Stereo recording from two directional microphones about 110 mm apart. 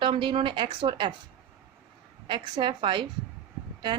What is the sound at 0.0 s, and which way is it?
Speech, 50° right (ahead or behind).